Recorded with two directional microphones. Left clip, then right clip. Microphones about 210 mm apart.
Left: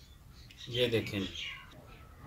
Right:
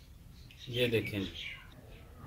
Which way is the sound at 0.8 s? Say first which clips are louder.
Left 1 dB; 5° right (ahead or behind).